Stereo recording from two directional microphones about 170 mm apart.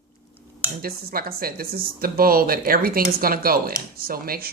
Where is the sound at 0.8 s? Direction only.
60° right (ahead or behind).